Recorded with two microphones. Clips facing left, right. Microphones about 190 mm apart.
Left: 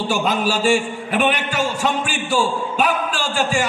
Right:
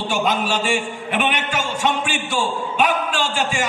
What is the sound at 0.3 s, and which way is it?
A man's voice, 40° left (ahead or behind).